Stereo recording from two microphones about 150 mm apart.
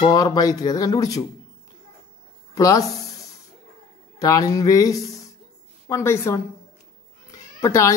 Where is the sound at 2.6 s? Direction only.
25° left (ahead or behind).